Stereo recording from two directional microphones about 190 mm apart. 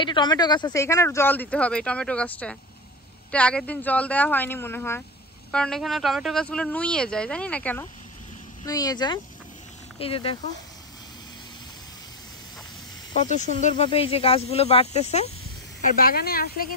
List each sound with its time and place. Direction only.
0.0 s speech: 25° left (ahead or behind)
8.6 s speech: 20° left (ahead or behind)
13.6 s speech: 40° left (ahead or behind)
16.0 s speech: 50° left (ahead or behind)